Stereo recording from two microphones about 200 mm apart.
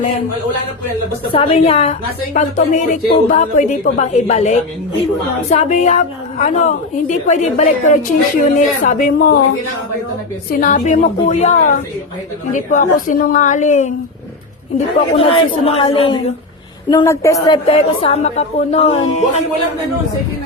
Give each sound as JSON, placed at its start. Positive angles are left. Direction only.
{"t": 1.3, "sound": "a woman's voice", "side_deg": 30}
{"t": 10.5, "sound": "a woman's voice", "side_deg": 40}
{"t": 15.1, "sound": "a woman's voice", "side_deg": 25}
{"t": 17.4, "sound": "a woman's voice", "side_deg": 25}